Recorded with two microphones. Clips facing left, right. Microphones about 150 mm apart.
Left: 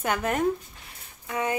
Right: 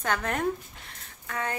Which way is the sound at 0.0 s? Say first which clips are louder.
Left 3 dB; 10° left (ahead or behind).